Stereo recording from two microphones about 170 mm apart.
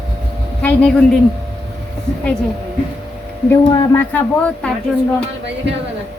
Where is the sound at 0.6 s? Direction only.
5° left (ahead or behind).